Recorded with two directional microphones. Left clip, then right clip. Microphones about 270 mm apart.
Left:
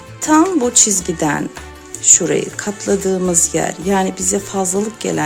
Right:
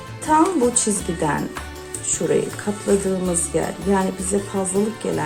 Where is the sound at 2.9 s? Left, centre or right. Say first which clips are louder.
Left 4 dB; left.